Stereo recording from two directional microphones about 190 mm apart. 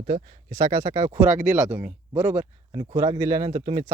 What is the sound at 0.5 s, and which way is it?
Speech, 15° right (ahead or behind).